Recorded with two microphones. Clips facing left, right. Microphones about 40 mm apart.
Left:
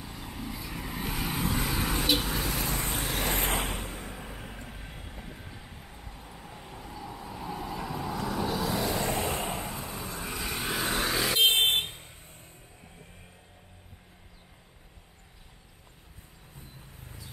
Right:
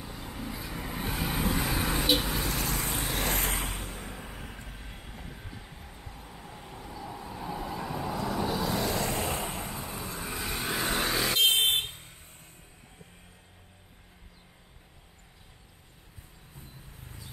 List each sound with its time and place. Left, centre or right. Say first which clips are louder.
0.0 s vehicle: even; centre
3.4 s a sound: left 3 dB; left
3.7 s vehicle: left 2 dB; centre